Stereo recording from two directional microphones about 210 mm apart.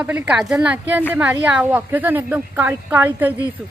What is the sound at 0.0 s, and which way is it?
A woman's voice, 5° right (ahead or behind).